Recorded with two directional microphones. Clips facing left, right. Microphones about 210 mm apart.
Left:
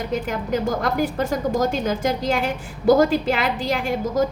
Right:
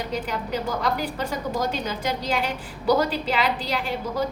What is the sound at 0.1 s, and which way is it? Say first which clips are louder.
A woman's voice: left 4 dB; 50° left (ahead or behind).